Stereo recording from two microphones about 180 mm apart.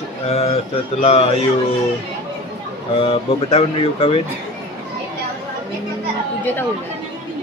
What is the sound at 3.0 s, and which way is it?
Speech, 35° left (ahead or behind).